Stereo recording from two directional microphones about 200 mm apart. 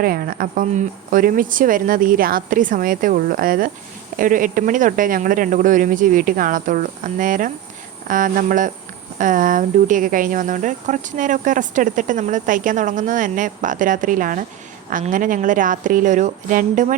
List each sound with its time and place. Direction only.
0.0 s speech: 45° right (ahead or behind)